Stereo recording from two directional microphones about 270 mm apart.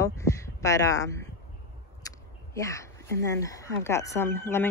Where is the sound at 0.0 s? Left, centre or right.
Centre.